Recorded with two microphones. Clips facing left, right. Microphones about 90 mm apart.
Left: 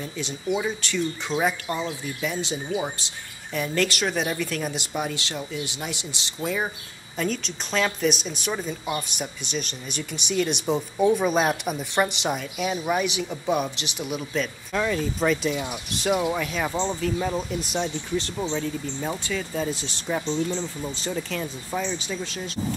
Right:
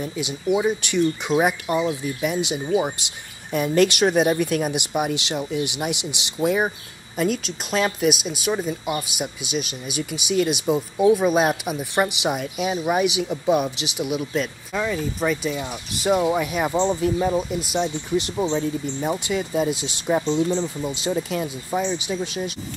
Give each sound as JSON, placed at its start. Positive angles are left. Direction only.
{"t": 0.0, "sound": "speech", "side_deg": -10}
{"t": 12.5, "sound": "speech", "side_deg": -15}